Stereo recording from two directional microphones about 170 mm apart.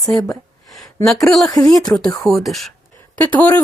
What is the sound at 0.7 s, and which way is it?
Speech, centre (ahead or behind).